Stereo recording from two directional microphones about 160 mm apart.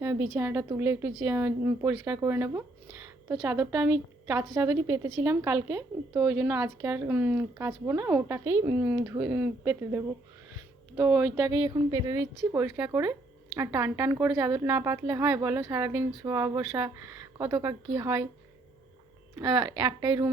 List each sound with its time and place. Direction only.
0.0 s a woman's voice: 15° right (ahead or behind)
12.5 s speech: 15° right (ahead or behind)
19.4 s speech: 20° right (ahead or behind)